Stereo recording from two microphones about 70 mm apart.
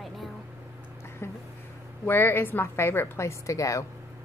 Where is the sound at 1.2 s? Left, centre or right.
Left.